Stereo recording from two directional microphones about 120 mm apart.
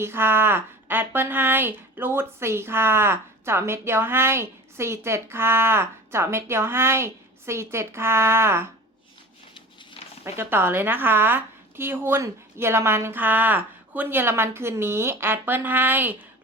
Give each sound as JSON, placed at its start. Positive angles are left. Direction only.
{"t": 0.0, "sound": "a woman's voice", "side_deg": -20}
{"t": 10.3, "sound": "a woman's voice", "side_deg": -20}